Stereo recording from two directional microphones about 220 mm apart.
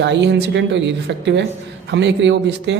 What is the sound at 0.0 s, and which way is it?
Speech, 50° right (ahead or behind).